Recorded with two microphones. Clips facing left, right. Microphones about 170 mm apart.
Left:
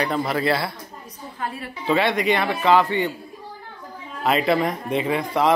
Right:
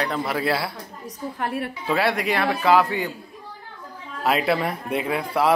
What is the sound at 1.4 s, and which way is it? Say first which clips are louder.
Speech: right 3 dB; 65° right (ahead or behind).